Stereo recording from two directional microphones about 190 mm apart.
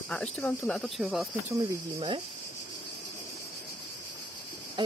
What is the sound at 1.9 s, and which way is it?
Cricket, 30° right (ahead or behind).